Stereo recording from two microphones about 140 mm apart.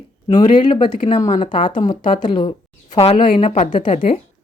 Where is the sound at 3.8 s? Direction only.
40° left (ahead or behind).